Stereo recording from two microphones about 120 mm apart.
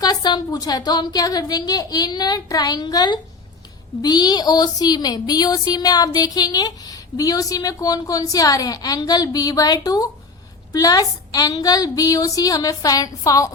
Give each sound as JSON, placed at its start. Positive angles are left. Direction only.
{"t": 0.0, "sound": "speech", "side_deg": 35}